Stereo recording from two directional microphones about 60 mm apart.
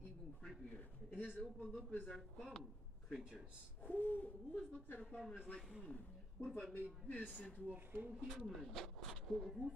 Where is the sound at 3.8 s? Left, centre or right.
Left.